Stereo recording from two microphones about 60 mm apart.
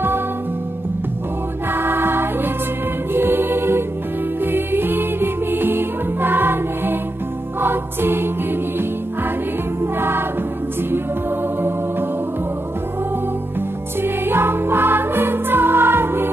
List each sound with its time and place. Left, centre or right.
1.7 s music: right
9.9 s music: right
14.0 s music: right